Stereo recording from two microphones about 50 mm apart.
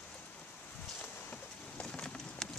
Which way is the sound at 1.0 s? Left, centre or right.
Left.